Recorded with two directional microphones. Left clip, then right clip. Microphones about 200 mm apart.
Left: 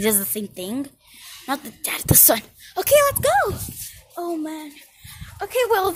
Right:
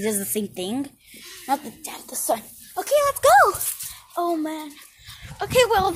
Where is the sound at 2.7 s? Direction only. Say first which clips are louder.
Left 4 dB; 40° left (ahead or behind).